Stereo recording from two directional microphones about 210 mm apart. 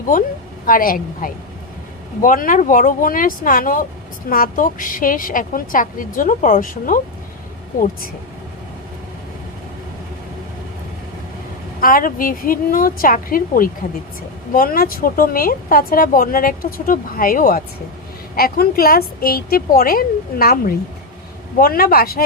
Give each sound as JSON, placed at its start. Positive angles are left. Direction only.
{"t": 0.1, "sound": "a woman's voice", "side_deg": 40}
{"t": 11.8, "sound": "a woman's voice", "side_deg": 40}